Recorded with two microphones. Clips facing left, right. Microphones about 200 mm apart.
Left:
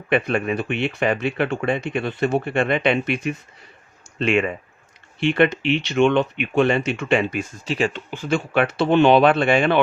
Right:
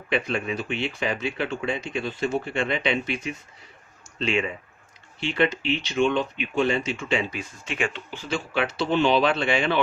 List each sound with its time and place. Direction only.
0.1 s speech: 60° left (ahead or behind)
7.6 s speech: 35° left (ahead or behind)
8.1 s speech: 55° left (ahead or behind)